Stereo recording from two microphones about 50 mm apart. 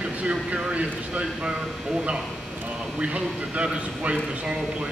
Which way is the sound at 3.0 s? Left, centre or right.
Right.